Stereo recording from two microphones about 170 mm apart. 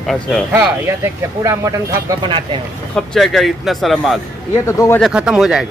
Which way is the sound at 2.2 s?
30° right (ahead or behind).